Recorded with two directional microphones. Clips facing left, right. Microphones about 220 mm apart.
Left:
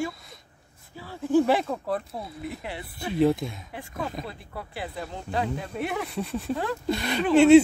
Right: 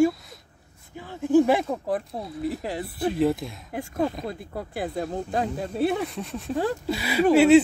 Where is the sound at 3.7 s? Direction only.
45° right (ahead or behind).